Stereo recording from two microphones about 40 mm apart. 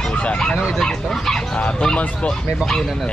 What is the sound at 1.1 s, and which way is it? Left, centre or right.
Chicken, centre.